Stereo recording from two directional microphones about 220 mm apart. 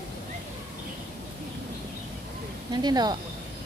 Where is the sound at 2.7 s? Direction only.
20° right (ahead or behind).